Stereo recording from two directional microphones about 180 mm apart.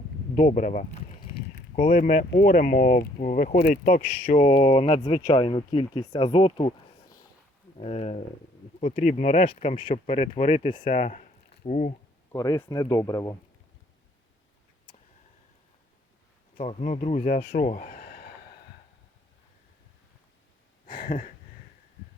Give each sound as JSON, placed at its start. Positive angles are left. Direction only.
{"t": 0.3, "sound": "speech", "side_deg": 40}
{"t": 3.8, "sound": "speech", "side_deg": 45}
{"t": 7.8, "sound": "speech", "side_deg": 35}
{"t": 12.3, "sound": "speech", "side_deg": 15}
{"t": 16.6, "sound": "speech", "side_deg": 40}
{"t": 17.9, "sound": "snort", "side_deg": 60}
{"t": 20.8, "sound": "a sound", "side_deg": 50}